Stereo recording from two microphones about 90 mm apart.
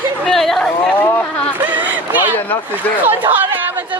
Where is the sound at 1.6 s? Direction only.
20° right (ahead or behind).